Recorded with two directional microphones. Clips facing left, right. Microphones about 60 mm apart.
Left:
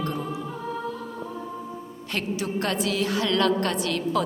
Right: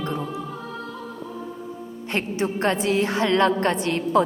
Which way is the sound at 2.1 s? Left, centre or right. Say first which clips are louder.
Right 3 dB; right.